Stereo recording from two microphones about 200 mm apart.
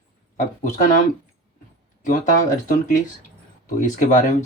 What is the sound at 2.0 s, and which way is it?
Speech, 40° left (ahead or behind).